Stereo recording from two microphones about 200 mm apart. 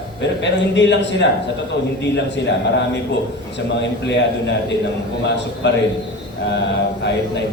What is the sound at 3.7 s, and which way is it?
Speech, 60° left (ahead or behind).